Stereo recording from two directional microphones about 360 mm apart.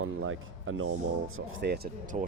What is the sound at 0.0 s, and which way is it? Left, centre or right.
Speech, right.